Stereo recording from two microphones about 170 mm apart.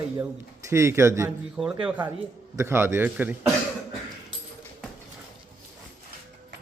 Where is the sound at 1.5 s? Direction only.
5° right (ahead or behind).